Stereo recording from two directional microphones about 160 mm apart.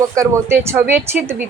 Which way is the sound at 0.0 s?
20° right (ahead or behind).